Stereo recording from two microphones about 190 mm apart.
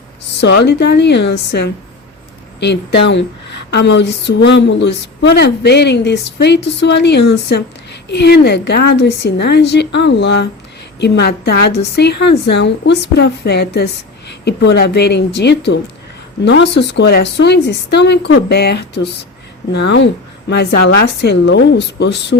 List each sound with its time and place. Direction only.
0.4 s a woman's voice: 60° left (ahead or behind)